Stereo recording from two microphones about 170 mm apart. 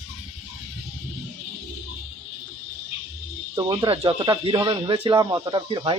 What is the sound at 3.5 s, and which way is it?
Speech, 25° right (ahead or behind).